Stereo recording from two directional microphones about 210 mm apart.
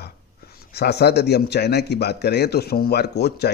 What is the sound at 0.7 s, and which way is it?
A man's voice, 50° left (ahead or behind).